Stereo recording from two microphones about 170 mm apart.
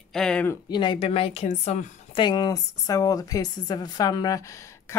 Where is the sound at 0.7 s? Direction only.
25° left (ahead or behind).